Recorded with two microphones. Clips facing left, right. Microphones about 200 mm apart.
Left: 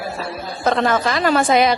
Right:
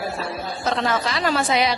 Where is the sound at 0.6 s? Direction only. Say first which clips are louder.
Left 6 dB; 55° left (ahead or behind).